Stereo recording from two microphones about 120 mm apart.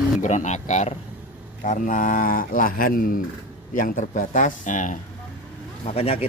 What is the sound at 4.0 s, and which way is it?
Speech, 90° left.